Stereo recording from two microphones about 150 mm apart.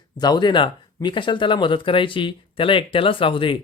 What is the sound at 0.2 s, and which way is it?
Speech, 30° left (ahead or behind).